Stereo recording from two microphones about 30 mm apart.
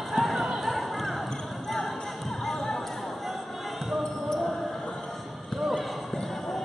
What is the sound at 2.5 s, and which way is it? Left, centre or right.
Basketball bounce, left.